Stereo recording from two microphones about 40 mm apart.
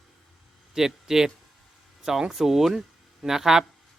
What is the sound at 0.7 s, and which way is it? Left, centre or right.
Speech, centre.